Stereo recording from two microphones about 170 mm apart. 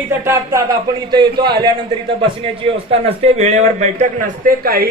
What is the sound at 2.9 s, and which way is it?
A man's voice, 35° right (ahead or behind).